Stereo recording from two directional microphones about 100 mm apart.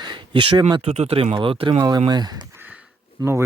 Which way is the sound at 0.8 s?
85° right.